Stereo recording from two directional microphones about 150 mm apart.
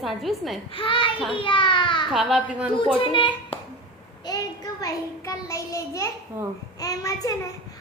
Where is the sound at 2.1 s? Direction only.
Centre (ahead or behind).